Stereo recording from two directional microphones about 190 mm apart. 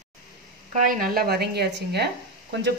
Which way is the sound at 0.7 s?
45° right (ahead or behind).